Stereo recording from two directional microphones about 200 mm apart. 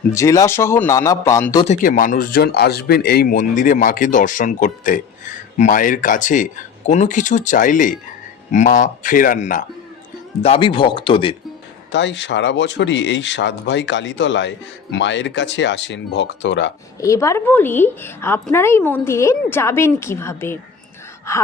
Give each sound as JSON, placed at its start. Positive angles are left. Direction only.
{"t": 0.1, "sound": "a woman's voice", "side_deg": 15}
{"t": 1.6, "sound": "speech", "side_deg": 40}
{"t": 10.4, "sound": "speech", "side_deg": 25}
{"t": 11.9, "sound": "speech", "side_deg": 65}
{"t": 17.0, "sound": "a woman's voice", "side_deg": 15}